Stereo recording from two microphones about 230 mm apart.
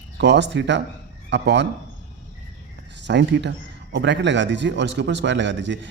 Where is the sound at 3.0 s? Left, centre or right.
Right.